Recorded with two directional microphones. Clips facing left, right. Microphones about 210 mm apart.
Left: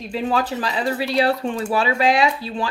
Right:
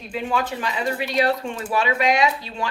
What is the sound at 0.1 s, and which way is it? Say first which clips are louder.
Speech: left 3 dB; 35° left (ahead or behind).